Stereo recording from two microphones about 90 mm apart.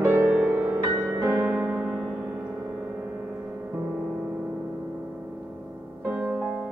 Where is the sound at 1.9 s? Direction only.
15° right (ahead or behind).